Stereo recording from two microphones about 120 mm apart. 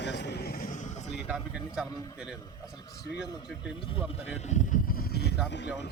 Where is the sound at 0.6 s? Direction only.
90° left.